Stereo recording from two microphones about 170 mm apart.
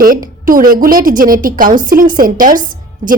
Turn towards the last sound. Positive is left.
turn(degrees=-55)  # may be behind; listen again after turning